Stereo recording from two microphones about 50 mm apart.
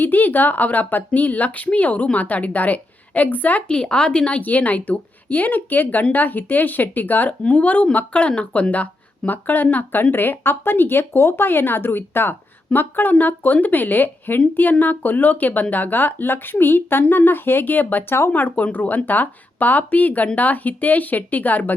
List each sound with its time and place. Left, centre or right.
0.0 s speech: left
3.7 s speech: centre; by 21.7 s left